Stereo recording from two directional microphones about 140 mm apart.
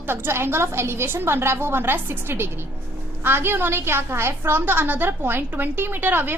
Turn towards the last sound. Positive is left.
turn(degrees=-15)  # may be behind; listen again after turning